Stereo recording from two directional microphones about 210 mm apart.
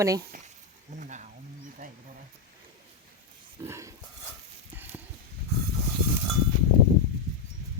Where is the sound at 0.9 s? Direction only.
35° right (ahead or behind).